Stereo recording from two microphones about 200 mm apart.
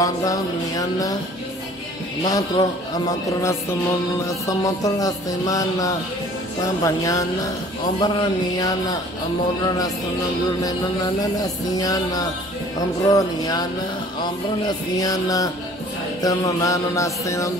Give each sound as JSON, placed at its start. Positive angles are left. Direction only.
{"t": 0.0, "sound": "music", "side_deg": 15}
{"t": 2.2, "sound": "speech", "side_deg": 20}
{"t": 4.3, "sound": "music", "side_deg": 15}
{"t": 8.0, "sound": "speech", "side_deg": 20}
{"t": 11.7, "sound": "music", "side_deg": 20}
{"t": 15.0, "sound": "music", "side_deg": 15}